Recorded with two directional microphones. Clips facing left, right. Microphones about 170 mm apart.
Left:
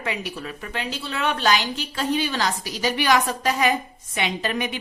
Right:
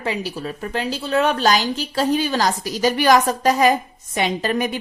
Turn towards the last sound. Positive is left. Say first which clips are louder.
# right 5 dB
turn(degrees=-40)  # may be behind; listen again after turning